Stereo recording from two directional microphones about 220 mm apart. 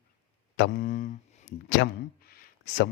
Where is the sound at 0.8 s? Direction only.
35° left (ahead or behind).